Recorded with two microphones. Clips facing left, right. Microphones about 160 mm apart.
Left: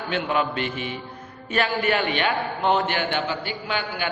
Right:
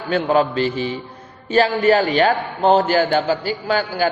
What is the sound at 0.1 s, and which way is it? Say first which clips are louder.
A man's voice: right 8 dB; 35° right (ahead or behind).